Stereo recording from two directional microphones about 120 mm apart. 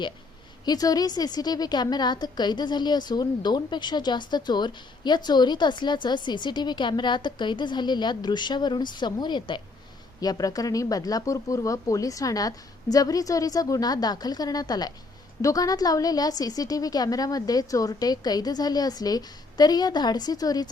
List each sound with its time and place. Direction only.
0.6 s a woman's voice: 35° left (ahead or behind)